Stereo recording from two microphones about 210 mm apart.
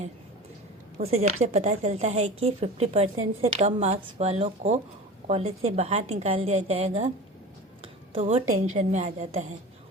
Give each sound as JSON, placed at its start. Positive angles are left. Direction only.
{"t": 0.9, "sound": "a woman's voice", "side_deg": -30}